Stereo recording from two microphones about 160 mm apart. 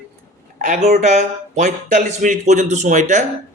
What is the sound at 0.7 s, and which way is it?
Speech, 50° right (ahead or behind).